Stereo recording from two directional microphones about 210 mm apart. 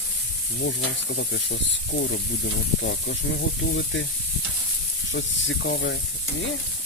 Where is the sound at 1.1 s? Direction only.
60° left (ahead or behind).